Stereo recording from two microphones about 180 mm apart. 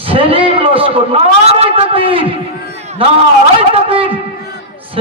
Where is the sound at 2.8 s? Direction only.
35° right (ahead or behind).